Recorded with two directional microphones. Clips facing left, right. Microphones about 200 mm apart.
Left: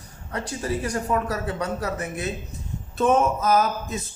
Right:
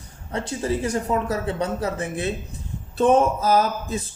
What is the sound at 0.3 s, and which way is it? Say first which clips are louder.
A man's voice: right 3 dB; 25° right (ahead or behind).